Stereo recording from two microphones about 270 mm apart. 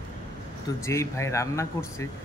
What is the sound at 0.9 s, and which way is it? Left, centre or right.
A man's voice, centre.